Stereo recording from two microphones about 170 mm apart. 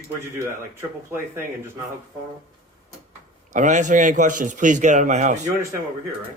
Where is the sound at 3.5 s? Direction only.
45° right (ahead or behind).